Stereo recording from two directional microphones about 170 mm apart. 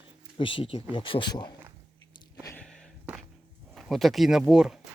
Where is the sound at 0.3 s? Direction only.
30° left (ahead or behind).